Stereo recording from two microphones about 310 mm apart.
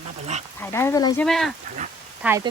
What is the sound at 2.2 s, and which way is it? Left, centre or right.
Speech, centre.